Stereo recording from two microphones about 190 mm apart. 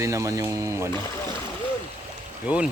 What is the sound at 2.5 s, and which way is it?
Speech, 5° right (ahead or behind).